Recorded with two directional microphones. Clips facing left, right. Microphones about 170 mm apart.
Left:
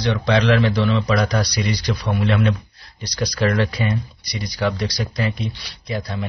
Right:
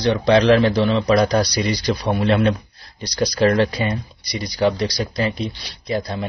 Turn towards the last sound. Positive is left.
turn(degrees=-30)  # may be behind; listen again after turning